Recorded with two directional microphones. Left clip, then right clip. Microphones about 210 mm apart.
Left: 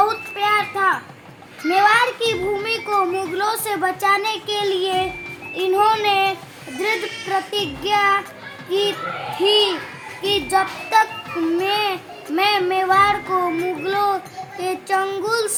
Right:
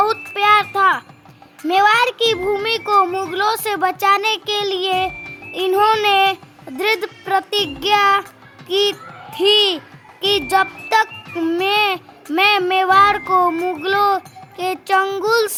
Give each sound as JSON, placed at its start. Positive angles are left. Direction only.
{"t": 0.3, "sound": "a sound", "side_deg": -50}
{"t": 1.7, "sound": "a child's voice", "side_deg": -50}
{"t": 5.5, "sound": "child singing", "side_deg": -50}
{"t": 10.2, "sound": "speech", "side_deg": -50}
{"t": 11.5, "sound": "child singing", "side_deg": -50}